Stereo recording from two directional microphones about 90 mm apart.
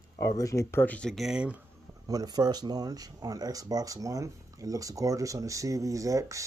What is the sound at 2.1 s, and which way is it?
Speech, 45° right (ahead or behind).